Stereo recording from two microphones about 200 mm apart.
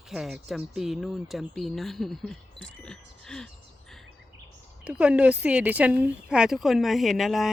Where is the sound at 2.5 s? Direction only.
65° right (ahead or behind).